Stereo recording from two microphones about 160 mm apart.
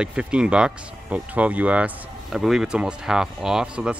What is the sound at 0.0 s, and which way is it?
Speech, 5° right (ahead or behind).